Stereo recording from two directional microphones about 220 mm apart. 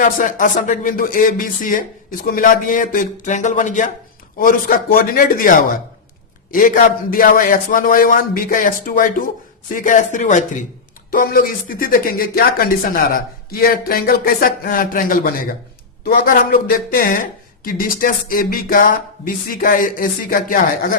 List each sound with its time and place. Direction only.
0.0 s speech: 35° left (ahead or behind)